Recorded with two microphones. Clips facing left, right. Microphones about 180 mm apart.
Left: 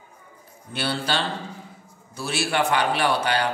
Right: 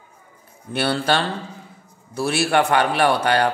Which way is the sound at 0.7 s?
55° right (ahead or behind).